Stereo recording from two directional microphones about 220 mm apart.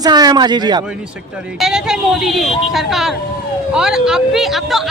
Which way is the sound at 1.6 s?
Centre (ahead or behind).